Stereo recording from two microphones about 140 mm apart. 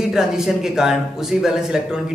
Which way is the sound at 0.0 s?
5° right (ahead or behind).